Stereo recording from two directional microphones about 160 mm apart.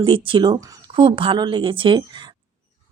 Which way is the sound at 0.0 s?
30° right (ahead or behind).